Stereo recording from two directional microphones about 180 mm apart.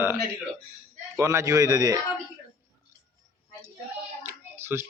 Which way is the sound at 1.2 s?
15° right (ahead or behind).